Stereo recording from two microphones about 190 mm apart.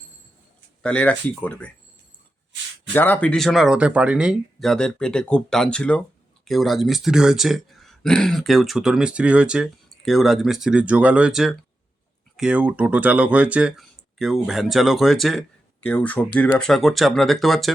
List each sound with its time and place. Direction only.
0.8 s speech: 5° left (ahead or behind)
2.9 s speech: 10° left (ahead or behind)